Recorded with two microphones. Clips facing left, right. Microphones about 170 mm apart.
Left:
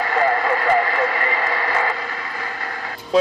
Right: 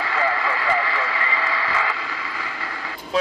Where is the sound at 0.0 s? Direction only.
50° left (ahead or behind).